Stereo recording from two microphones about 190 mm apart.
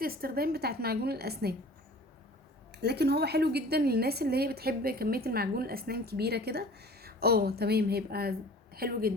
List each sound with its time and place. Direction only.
0.0 s a woman's voice: 50° right (ahead or behind)
2.7 s a woman's voice: 60° right (ahead or behind)